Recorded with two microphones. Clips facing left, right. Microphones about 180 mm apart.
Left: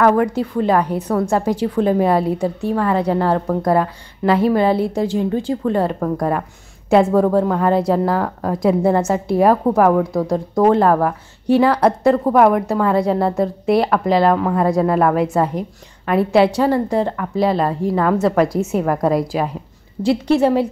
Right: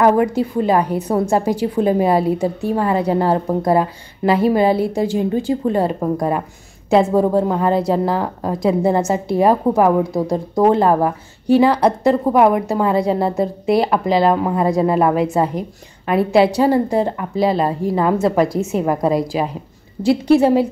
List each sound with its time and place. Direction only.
0.0 s a woman's voice: 10° right (ahead or behind)
9.9 s a woman's voice: 20° right (ahead or behind)
10.7 s a woman's voice: 5° right (ahead or behind)